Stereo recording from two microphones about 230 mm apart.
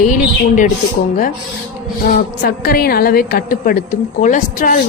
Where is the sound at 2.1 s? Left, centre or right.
Left.